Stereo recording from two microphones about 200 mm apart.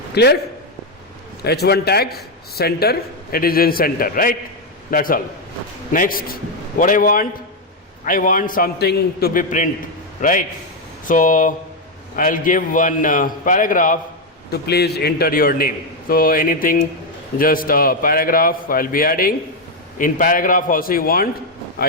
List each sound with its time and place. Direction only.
0.1 s a man's voice: 55° left (ahead or behind)
1.5 s a man's voice: 55° left (ahead or behind)
14.5 s a man's voice: 55° left (ahead or behind)